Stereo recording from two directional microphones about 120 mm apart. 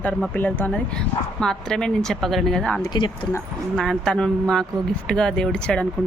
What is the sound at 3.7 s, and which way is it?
Speech, 5° left (ahead or behind).